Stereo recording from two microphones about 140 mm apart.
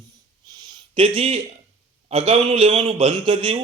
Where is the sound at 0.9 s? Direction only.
40° right (ahead or behind).